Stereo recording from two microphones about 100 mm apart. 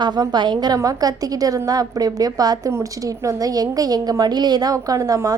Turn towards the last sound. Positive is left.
turn(degrees=-35)  # may be behind; listen again after turning